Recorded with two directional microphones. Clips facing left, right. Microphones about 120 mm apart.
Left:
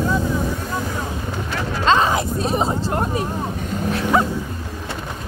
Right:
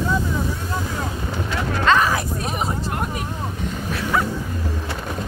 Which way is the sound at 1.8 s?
20° left (ahead or behind).